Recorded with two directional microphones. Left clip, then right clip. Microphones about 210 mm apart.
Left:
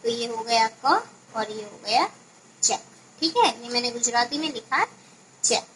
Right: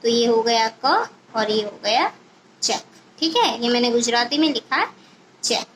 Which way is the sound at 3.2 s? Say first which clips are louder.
Right 2 dB; 30° right (ahead or behind).